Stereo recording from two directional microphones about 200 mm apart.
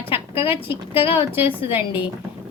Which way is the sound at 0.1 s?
30° left (ahead or behind).